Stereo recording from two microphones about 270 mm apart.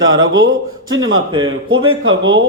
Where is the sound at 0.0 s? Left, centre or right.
Right.